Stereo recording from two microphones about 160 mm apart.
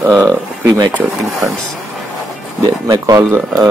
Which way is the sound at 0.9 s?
Centre (ahead or behind).